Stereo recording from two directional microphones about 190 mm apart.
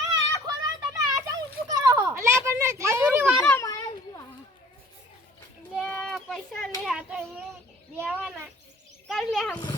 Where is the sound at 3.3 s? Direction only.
5° left (ahead or behind).